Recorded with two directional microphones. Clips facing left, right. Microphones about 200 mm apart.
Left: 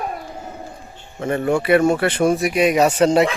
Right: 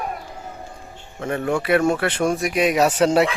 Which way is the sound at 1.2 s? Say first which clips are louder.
Left 3 dB; centre (ahead or behind).